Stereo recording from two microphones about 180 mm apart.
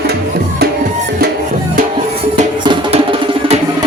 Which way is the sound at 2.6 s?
25° right (ahead or behind).